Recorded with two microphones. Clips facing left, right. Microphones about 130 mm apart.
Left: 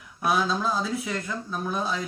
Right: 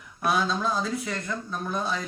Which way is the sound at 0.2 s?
Centre (ahead or behind).